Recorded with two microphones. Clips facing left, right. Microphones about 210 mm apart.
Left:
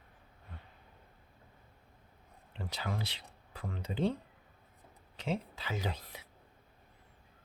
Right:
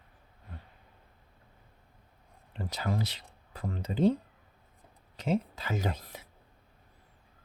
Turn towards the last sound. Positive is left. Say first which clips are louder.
# right 5 dB
turn(degrees=-45)  # may be behind; listen again after turning